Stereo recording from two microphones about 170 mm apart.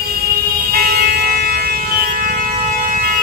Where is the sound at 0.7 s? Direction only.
65° right (ahead or behind).